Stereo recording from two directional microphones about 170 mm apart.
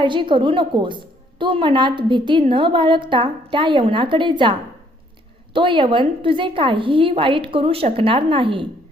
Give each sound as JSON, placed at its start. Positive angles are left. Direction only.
{"t": 0.0, "sound": "a woman's voice", "side_deg": -30}
{"t": 5.5, "sound": "a woman's voice", "side_deg": -30}